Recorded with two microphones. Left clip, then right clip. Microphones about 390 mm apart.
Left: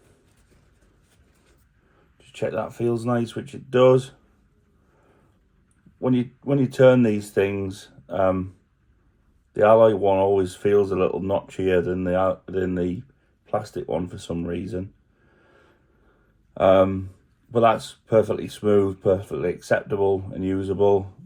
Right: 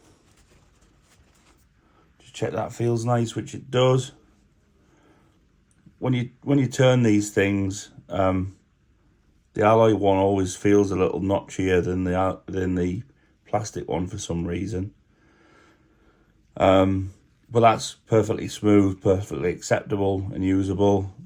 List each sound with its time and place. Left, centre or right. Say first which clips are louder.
2.1 s speech: left 1 dB; right
6.0 s speech: left 4 dB; right
9.6 s speech: left 3 dB; right
16.6 s speech: left 2 dB; right